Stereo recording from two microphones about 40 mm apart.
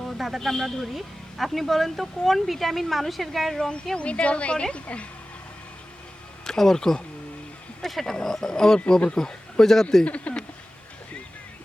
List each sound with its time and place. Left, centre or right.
0.2 s speech: centre
0.4 s speech: centre
3.6 s speech: left
6.4 s a man's voice: centre
10.0 s speech: left